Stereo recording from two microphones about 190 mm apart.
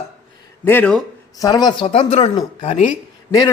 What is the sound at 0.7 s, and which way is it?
Speech, 10° left (ahead or behind).